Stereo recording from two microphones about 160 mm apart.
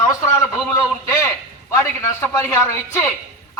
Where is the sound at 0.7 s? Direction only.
20° left (ahead or behind).